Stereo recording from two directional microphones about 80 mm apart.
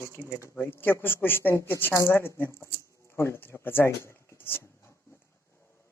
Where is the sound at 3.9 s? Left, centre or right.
Left.